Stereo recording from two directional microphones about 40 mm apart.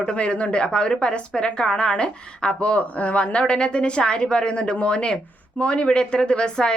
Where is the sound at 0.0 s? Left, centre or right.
Left.